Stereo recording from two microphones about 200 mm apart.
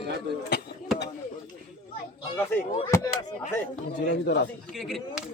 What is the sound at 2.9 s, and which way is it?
Speech, 15° left (ahead or behind).